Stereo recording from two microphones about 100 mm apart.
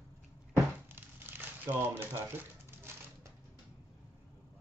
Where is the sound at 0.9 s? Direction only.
20° right (ahead or behind).